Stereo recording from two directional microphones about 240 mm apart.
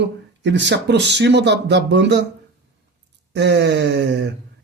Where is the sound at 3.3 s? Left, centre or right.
Right.